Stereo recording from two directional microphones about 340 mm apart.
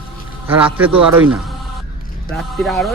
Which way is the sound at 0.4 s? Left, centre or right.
Centre.